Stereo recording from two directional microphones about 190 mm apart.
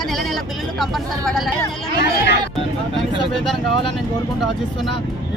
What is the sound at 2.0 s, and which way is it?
Speech, 65° left (ahead or behind).